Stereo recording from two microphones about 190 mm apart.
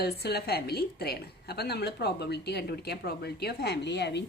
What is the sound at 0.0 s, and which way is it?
A woman's voice, 55° left (ahead or behind).